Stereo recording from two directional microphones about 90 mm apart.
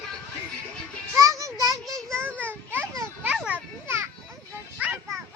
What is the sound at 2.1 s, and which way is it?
Children playing, 25° right (ahead or behind).